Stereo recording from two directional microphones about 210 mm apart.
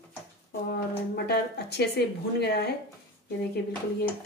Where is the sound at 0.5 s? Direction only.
50° left (ahead or behind).